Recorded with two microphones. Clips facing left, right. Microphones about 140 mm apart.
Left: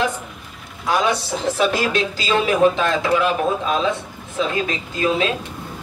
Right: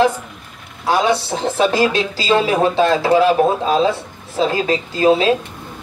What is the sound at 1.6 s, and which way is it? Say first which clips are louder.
Speech: right 5 dB; 30° right (ahead or behind).